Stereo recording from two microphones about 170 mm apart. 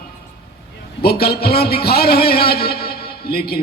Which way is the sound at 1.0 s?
65° left (ahead or behind).